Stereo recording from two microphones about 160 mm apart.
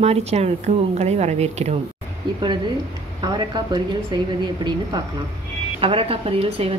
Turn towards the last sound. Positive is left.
turn(degrees=-35)  # may be behind; listen again after turning